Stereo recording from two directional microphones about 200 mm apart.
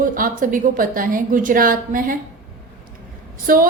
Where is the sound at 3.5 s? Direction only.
45° right (ahead or behind).